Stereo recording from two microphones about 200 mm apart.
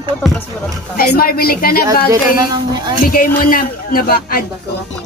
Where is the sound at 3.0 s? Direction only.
45° left (ahead or behind).